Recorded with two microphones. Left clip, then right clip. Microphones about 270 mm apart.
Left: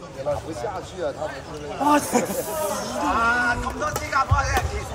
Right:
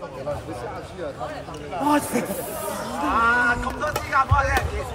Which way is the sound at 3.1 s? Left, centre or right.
Centre.